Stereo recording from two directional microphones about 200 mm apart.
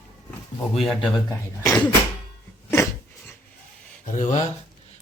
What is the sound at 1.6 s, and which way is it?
Speech, 15° left (ahead or behind).